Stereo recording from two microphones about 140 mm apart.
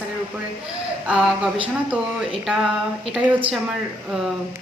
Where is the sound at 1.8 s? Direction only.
5° right (ahead or behind).